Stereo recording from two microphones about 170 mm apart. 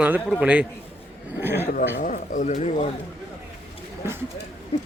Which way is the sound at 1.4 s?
15° right (ahead or behind).